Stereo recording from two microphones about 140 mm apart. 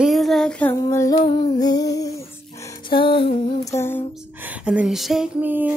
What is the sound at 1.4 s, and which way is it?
Music, 30° left (ahead or behind).